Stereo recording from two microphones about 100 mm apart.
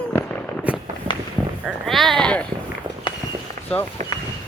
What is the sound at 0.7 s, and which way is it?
Walk, 10° right (ahead or behind).